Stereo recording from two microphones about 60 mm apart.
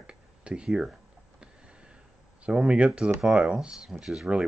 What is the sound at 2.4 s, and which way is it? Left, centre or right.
Speech, centre.